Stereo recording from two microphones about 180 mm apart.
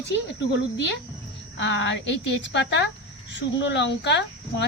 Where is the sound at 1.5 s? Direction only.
85° left.